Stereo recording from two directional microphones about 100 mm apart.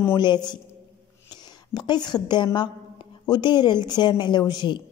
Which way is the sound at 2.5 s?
50° left (ahead or behind).